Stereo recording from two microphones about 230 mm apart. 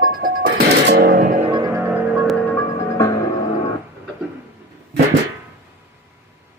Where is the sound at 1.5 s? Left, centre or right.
Centre.